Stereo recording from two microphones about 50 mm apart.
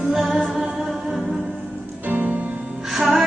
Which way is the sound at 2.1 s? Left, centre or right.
Right.